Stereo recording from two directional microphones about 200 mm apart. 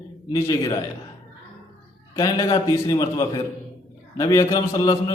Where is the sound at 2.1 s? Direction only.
20° left (ahead or behind).